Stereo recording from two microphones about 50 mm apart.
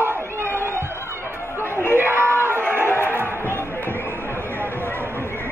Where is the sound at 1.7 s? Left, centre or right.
Left.